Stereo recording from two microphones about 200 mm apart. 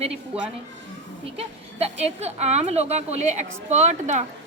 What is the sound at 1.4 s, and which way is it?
A woman's voice, 30° right (ahead or behind).